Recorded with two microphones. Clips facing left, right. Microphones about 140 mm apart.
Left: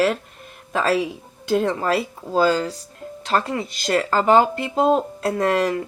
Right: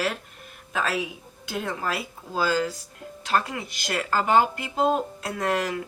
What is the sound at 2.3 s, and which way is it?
Speech, 30° left (ahead or behind).